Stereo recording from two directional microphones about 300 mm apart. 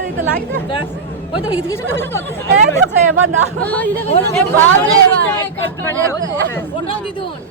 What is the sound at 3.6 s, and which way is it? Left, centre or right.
Speech, centre.